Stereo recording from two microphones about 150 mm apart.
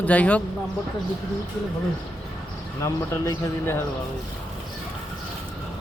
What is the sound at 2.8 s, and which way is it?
A man's voice, 20° left (ahead or behind).